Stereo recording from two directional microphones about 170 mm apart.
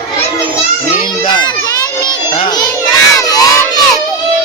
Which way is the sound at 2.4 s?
25° left (ahead or behind).